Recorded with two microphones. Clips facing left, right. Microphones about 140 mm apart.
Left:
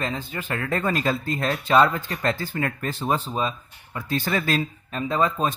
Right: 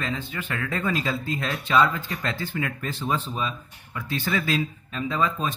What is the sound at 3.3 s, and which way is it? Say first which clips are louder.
Speech: left 3 dB; 35° left (ahead or behind).